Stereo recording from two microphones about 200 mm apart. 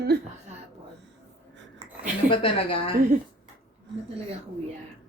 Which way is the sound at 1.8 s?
30° right (ahead or behind).